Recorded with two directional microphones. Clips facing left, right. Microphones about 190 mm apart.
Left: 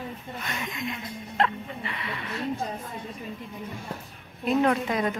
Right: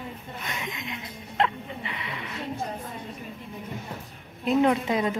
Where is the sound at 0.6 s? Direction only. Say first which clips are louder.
Left 3 dB; 20° right (ahead or behind).